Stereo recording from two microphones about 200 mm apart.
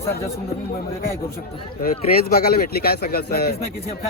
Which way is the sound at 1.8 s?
50° left (ahead or behind).